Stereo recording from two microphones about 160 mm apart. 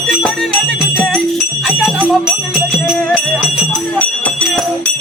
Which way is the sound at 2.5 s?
5° right (ahead or behind).